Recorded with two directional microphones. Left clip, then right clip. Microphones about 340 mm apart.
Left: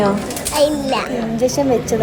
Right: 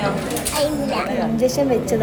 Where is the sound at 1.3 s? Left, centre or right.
Centre.